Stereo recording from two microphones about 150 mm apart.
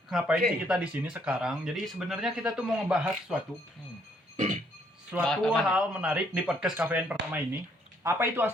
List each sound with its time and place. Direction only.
0.1 s speech: 5° right (ahead or behind)
4.4 s music: 55° right (ahead or behind)
5.2 s speech: 5° left (ahead or behind)
5.6 s speech: 10° right (ahead or behind)